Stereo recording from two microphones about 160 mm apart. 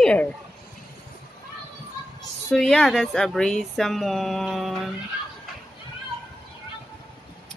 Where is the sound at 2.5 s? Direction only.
Centre (ahead or behind).